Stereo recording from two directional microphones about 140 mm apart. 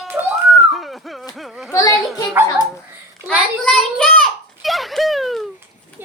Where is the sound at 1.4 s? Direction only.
Centre (ahead or behind).